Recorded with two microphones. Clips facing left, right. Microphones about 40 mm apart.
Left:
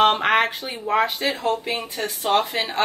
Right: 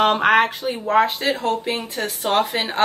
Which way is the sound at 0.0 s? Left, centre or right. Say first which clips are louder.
Right 2 dB; centre.